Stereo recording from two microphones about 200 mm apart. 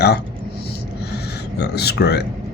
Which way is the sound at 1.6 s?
55° left (ahead or behind).